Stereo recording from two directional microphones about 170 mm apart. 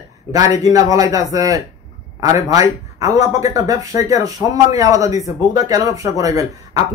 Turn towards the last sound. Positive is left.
turn(degrees=-20)  # may be behind; listen again after turning